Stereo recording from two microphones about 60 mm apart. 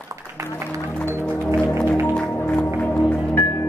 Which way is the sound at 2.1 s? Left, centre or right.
Left.